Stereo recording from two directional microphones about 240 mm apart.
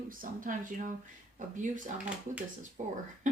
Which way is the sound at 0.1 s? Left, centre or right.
Right.